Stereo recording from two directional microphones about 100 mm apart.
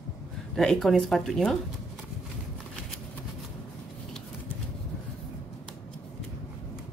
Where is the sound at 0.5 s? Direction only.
5° left (ahead or behind).